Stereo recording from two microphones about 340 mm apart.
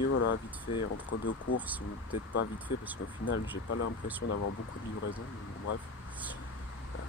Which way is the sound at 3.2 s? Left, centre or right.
Left.